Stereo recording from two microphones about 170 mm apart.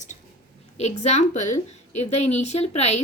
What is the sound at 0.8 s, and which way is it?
A woman's voice, 40° left (ahead or behind).